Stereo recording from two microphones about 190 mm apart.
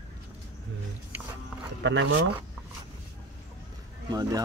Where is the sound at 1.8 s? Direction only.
70° right (ahead or behind).